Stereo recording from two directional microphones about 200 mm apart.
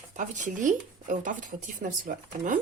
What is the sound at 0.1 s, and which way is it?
Speech, 40° right (ahead or behind).